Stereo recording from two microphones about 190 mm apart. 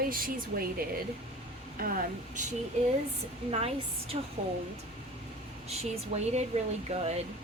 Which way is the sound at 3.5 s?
30° right (ahead or behind).